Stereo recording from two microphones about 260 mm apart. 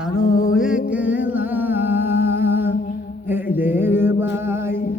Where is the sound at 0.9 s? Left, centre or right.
Centre.